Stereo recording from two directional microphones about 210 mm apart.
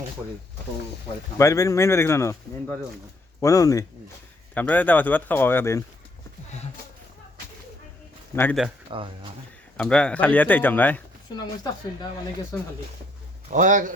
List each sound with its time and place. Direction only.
1.4 s a man's voice: 15° left (ahead or behind)
8.9 s speech: 25° right (ahead or behind)
9.7 s a man's voice: 5° left (ahead or behind)
11.3 s a man's voice: 20° left (ahead or behind)
13.5 s a man's voice: 35° right (ahead or behind)